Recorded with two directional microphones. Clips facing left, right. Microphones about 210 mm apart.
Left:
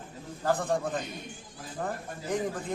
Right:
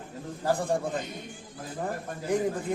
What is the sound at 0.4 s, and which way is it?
Speech, 10° right (ahead or behind).